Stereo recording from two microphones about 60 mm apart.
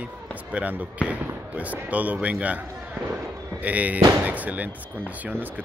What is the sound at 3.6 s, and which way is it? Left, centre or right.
Speech, right.